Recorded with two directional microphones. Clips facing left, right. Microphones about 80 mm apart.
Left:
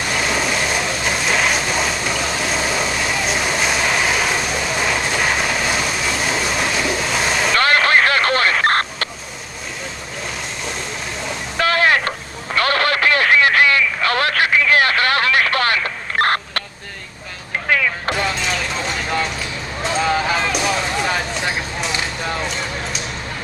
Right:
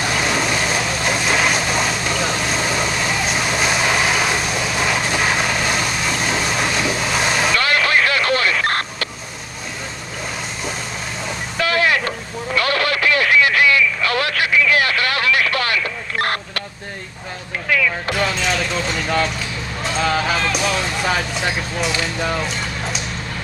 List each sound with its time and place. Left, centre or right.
0.1 s vehicle: centre
7.5 s vehicle: left
11.5 s vehicle: left
12.5 s radio: left
17.6 s vehicle: left
19.8 s a sound: centre